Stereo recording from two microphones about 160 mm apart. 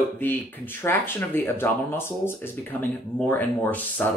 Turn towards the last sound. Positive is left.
turn(degrees=10)  # may be behind; listen again after turning